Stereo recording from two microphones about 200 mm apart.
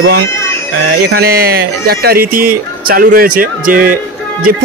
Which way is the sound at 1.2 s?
50° right (ahead or behind).